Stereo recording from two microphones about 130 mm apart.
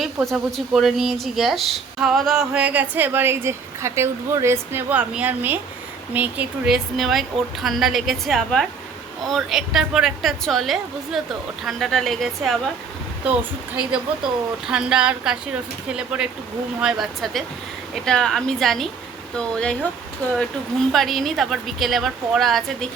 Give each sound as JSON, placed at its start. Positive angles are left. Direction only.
{"t": 0.0, "sound": "speech", "side_deg": 0}
{"t": 14.7, "sound": "speech", "side_deg": -5}